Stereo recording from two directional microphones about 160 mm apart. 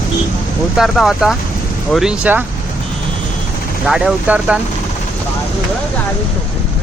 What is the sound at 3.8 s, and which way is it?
Speech, 5° right (ahead or behind).